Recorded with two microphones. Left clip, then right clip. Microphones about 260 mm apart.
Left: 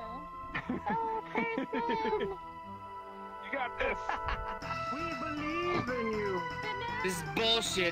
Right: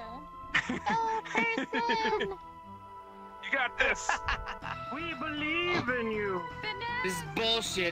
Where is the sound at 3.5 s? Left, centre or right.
Right.